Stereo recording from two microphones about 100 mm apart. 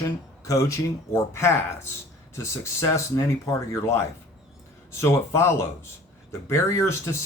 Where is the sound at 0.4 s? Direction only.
30° left (ahead or behind).